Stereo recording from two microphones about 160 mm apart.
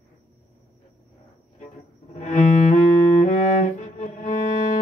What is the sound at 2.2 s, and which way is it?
Music, 50° left (ahead or behind).